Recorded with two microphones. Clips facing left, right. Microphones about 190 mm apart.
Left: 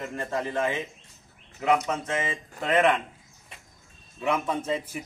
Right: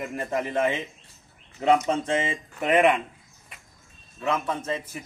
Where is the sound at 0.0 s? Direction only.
15° right (ahead or behind).